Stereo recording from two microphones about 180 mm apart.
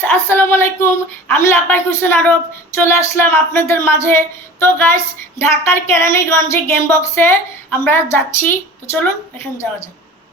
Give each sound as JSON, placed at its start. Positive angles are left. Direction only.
{"t": 0.0, "sound": "a woman's voice", "side_deg": 15}